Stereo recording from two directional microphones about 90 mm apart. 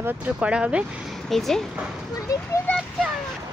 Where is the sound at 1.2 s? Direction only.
5° left (ahead or behind).